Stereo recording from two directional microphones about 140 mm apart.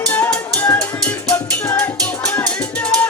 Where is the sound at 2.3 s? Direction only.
10° left (ahead or behind).